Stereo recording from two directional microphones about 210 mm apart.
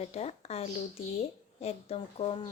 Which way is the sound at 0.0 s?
30° left (ahead or behind).